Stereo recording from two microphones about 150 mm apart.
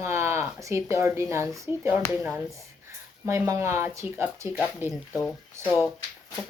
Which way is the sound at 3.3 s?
20° right (ahead or behind).